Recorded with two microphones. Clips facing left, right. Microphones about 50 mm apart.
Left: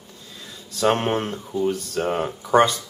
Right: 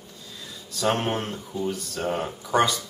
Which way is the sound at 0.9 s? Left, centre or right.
Left.